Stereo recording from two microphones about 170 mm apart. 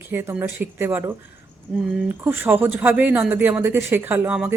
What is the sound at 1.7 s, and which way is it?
Speech, centre (ahead or behind).